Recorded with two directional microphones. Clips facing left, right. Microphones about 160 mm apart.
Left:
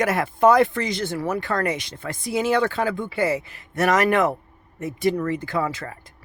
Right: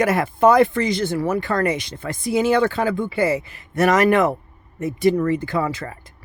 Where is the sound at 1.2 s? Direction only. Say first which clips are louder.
Right 2 dB; 10° right (ahead or behind).